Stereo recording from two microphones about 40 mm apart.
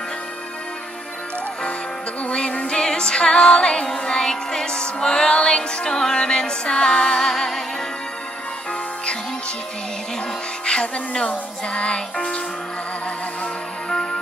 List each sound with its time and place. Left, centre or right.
2.2 s music: left; by 7.6 s centre
10.6 s music: left